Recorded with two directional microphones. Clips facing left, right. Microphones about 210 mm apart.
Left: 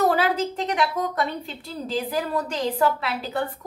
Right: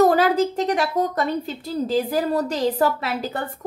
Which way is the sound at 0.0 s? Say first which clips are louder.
Right 5 dB; 45° right (ahead or behind).